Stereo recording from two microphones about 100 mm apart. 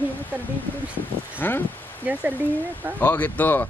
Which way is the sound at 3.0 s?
15° left (ahead or behind).